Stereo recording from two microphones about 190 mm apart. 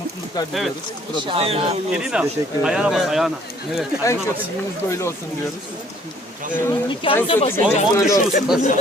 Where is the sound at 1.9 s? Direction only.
5° right (ahead or behind).